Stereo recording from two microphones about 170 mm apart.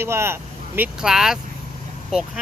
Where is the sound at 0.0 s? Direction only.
15° right (ahead or behind).